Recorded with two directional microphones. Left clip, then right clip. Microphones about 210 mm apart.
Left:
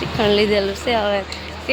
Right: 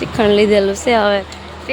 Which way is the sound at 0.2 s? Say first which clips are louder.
Right 5 dB; 20° right (ahead or behind).